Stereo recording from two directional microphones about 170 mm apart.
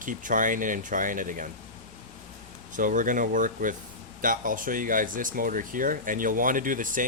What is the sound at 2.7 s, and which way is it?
Speech, 50° right (ahead or behind).